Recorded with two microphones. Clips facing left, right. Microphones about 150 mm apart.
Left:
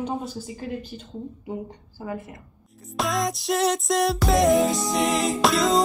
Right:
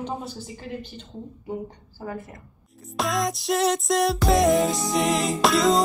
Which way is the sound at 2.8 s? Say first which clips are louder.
Even; centre (ahead or behind).